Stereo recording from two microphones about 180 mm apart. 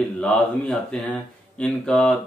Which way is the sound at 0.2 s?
Centre (ahead or behind).